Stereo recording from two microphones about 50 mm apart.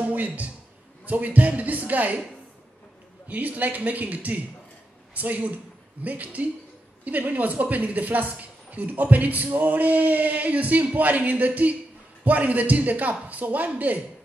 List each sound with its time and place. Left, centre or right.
0.0 s a sound: right
1.0 s a woman's voice: right
3.3 s a woman's voice: right